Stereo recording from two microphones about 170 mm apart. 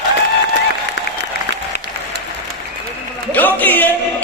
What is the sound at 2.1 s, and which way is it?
Applause, 85° right.